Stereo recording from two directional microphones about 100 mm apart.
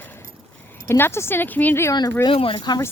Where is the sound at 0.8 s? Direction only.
25° left (ahead or behind).